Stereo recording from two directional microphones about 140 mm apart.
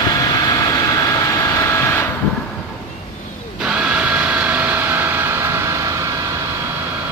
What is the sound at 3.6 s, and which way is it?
Vehicle, 10° right (ahead or behind).